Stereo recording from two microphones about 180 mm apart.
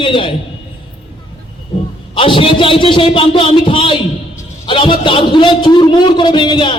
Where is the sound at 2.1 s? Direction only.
30° left (ahead or behind).